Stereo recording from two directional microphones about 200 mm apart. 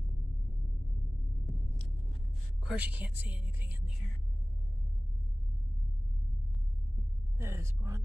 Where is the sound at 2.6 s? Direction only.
10° right (ahead or behind).